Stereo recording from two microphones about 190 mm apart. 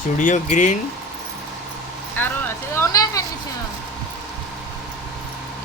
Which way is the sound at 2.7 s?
15° left (ahead or behind).